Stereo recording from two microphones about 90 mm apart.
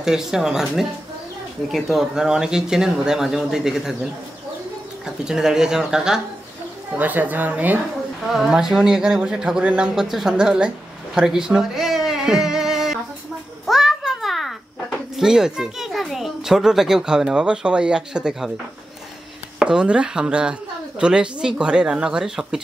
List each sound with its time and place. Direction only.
0.0 s speech: 5° right (ahead or behind)
5.0 s speech: 5° right (ahead or behind)
7.0 s a woman's voice: 20° right (ahead or behind)
8.3 s speech: 5° right (ahead or behind)
11.1 s a sound: 5° right (ahead or behind)
15.1 s a child's voice: 5° right (ahead or behind)
19.6 s speech: 10° right (ahead or behind)